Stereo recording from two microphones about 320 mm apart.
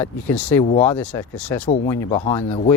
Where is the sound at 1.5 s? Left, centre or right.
Centre.